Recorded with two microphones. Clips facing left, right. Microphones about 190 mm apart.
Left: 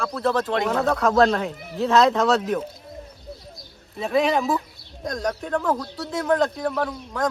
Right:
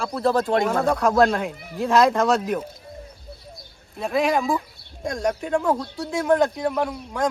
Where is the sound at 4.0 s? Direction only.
Centre (ahead or behind).